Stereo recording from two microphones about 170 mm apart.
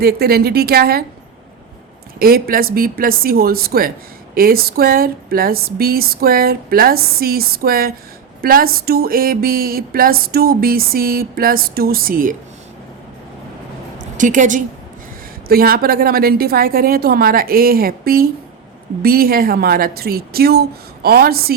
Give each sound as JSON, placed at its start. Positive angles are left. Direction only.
{"t": 0.0, "sound": "speech", "side_deg": -65}
{"t": 2.1, "sound": "speech", "side_deg": -60}
{"t": 14.2, "sound": "a woman's voice", "side_deg": -50}
{"t": 15.4, "sound": "speech", "side_deg": -60}